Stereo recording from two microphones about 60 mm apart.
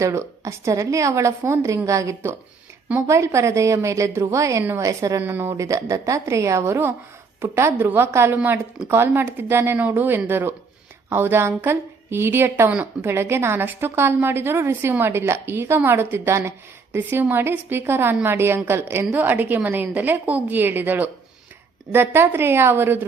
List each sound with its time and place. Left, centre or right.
0.0 s a woman's voice: right
5.2 s a woman's voice: right
5.5 s a woman's voice: right